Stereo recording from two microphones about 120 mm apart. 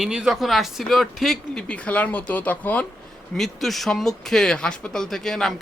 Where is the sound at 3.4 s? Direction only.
Centre (ahead or behind).